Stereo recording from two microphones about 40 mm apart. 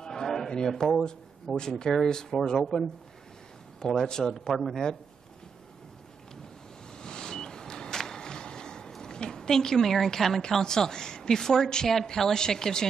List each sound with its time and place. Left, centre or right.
0.0 s a sound: centre
1.6 s a woman's voice: centre
3.8 s a woman's voice: centre
6.9 s vehicle: centre
8.9 s a woman's voice: centre